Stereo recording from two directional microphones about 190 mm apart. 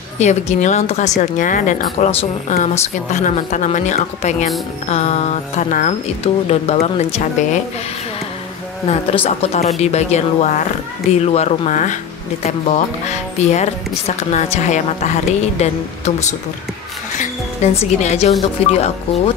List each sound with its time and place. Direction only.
0.2 s a woman's voice: 35° left (ahead or behind)
8.8 s a woman's voice: 30° left (ahead or behind)
17.2 s a woman's voice: 40° left (ahead or behind)